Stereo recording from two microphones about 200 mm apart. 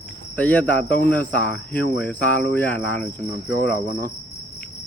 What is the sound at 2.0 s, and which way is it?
Cricket, 5° left (ahead or behind).